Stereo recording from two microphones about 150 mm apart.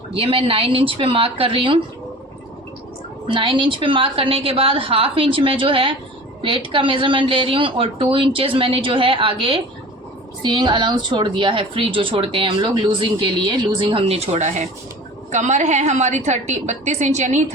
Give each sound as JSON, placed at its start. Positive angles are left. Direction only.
{"t": 0.1, "sound": "a woman's voice", "side_deg": -40}
{"t": 3.2, "sound": "a woman's voice", "side_deg": -35}